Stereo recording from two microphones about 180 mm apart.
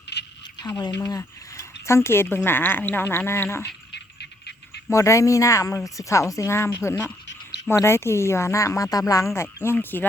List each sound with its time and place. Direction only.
0.1 s a sound: 70° left (ahead or behind)
0.9 s speech: 15° left (ahead or behind)
3.9 s cricket: 70° left (ahead or behind)
4.9 s speech: 15° left (ahead or behind)